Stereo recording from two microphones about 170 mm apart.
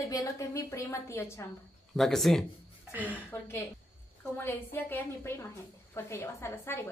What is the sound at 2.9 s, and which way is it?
Speech, 10° right (ahead or behind).